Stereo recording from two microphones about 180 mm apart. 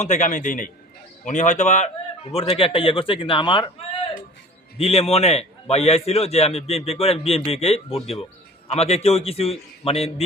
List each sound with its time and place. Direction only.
0.0 s a man's voice: 45° left (ahead or behind)
2.5 s a man's voice: 30° left (ahead or behind)
4.8 s a man's voice: 35° left (ahead or behind)